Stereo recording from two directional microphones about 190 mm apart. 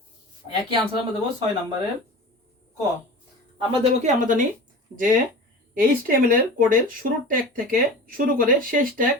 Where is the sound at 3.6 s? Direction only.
40° right (ahead or behind).